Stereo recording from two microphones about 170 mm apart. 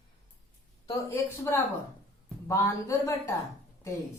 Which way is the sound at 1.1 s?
15° left (ahead or behind).